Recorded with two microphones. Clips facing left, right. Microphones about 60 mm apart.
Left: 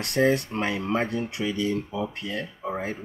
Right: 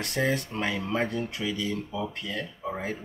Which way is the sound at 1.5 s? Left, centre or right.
Left.